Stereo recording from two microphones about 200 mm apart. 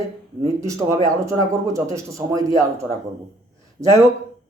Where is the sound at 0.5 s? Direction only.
15° right (ahead or behind).